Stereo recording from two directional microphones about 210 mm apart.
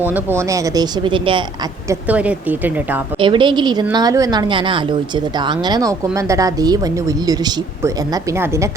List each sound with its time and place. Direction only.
0.0 s a woman's voice: 10° right (ahead or behind)
1.9 s a woman's voice: 5° right (ahead or behind)
3.2 s a woman's voice: 25° right (ahead or behind)